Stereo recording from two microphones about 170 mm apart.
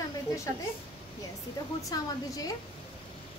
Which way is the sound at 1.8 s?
20° left (ahead or behind).